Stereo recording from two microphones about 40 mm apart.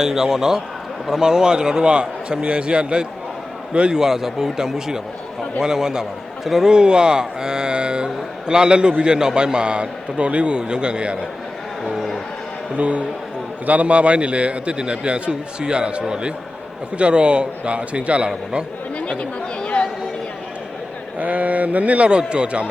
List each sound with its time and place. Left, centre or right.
0.0 s a man's voice: centre
12.7 s a man's voice: right
18.9 s chatter: left
21.2 s a man's voice: right